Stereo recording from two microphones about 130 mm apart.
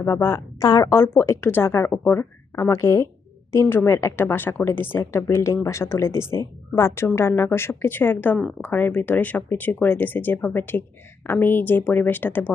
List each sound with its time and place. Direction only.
0.0 s a woman's voice: 20° left (ahead or behind)